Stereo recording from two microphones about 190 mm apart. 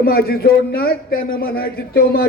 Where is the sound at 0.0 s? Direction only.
55° left (ahead or behind).